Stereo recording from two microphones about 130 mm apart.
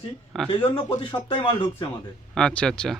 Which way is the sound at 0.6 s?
40° left (ahead or behind).